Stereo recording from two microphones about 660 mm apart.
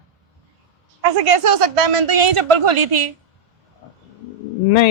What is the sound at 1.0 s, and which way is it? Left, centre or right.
Speech, right.